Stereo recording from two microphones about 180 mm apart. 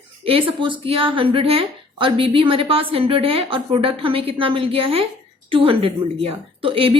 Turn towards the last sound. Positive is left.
turn(degrees=-30)  # may be behind; listen again after turning